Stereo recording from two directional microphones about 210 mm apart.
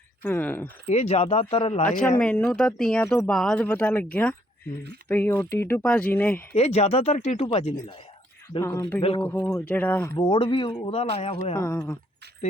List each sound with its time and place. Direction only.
0.2 s speech: 10° left (ahead or behind)
0.9 s speech: 30° left (ahead or behind)
2.0 s speech: 5° left (ahead or behind)
6.5 s speech: 30° left (ahead or behind)
8.4 s speech: 15° left (ahead or behind)
9.0 s speech: 25° left (ahead or behind)
9.5 s speech: 10° left (ahead or behind)
10.2 s speech: 20° left (ahead or behind)
11.5 s speech: 15° left (ahead or behind)